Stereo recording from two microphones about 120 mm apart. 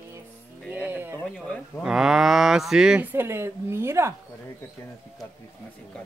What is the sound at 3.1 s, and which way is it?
A woman's voice, 20° right (ahead or behind).